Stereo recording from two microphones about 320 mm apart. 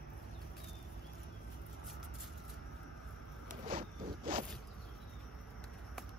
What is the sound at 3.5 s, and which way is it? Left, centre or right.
Zipper, right.